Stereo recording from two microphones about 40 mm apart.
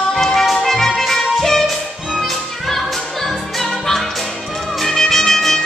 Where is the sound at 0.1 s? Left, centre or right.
Centre.